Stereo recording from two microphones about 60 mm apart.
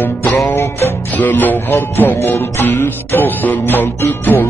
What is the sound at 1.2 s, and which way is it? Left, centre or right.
Music, left.